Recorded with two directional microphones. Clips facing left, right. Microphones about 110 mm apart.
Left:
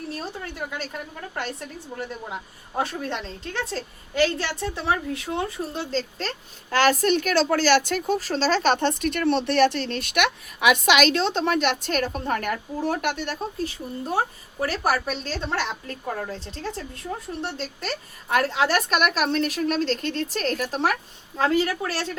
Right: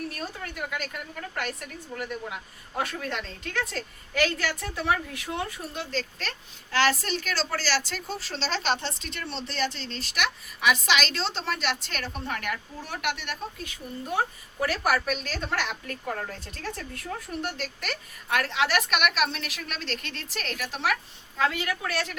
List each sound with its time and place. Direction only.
1.4 s a woman's voice: 30° left (ahead or behind)
6.7 s a woman's voice: 45° left (ahead or behind); by 22.2 s 30° left (ahead or behind)